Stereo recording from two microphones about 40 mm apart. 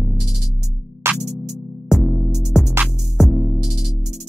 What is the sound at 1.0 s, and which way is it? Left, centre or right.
Music, right.